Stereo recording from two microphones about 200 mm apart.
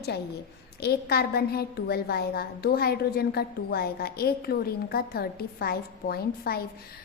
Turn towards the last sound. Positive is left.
turn(degrees=50)  # may be behind; listen again after turning